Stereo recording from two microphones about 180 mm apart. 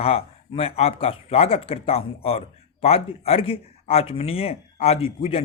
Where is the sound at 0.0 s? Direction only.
35° left (ahead or behind).